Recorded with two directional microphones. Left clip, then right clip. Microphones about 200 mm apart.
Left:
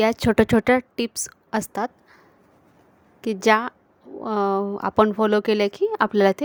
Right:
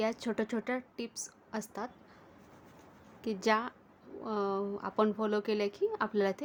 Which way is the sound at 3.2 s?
40° left (ahead or behind).